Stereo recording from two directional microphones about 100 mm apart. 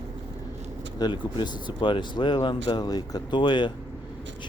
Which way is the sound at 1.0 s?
50° left (ahead or behind).